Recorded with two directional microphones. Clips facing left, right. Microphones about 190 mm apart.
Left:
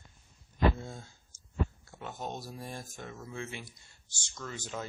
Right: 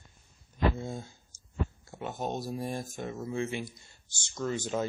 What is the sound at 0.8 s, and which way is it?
Speech, 20° right (ahead or behind).